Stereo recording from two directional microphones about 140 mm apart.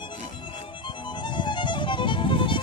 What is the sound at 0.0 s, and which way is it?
Music, 35° left (ahead or behind).